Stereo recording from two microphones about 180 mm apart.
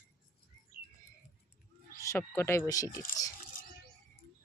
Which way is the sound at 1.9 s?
15° left (ahead or behind).